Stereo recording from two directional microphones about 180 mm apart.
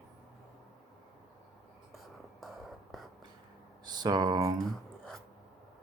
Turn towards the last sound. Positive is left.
turn(degrees=-20)  # may be behind; listen again after turning